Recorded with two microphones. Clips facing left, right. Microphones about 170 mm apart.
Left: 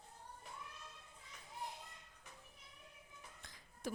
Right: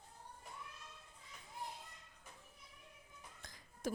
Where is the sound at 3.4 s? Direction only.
45° right (ahead or behind).